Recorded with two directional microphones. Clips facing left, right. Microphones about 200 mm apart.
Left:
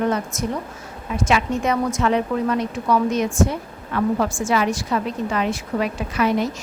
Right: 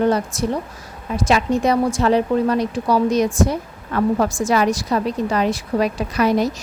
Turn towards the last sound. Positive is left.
turn(degrees=-40)  # may be behind; listen again after turning